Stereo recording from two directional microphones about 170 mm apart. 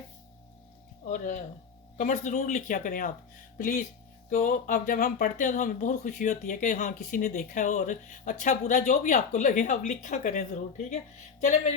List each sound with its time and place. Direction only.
1.0 s speech: 45° left (ahead or behind)